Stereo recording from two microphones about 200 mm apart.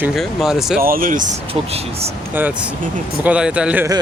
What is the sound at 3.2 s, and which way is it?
Speech, 5° right (ahead or behind).